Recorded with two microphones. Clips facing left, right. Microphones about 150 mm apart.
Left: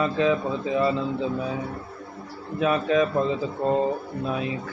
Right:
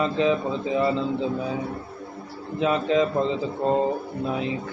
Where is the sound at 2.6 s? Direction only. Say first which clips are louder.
Even; 25° right (ahead or behind).